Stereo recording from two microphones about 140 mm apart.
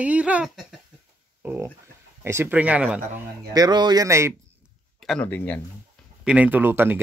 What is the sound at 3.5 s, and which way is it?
Speech, 30° right (ahead or behind).